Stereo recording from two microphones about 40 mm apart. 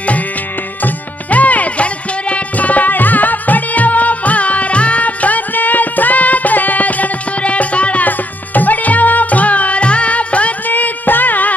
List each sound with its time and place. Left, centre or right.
0.8 s music: left
10.7 s music: left